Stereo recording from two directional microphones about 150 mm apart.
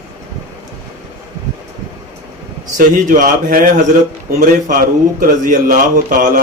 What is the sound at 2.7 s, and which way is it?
A man's voice, 60° right (ahead or behind).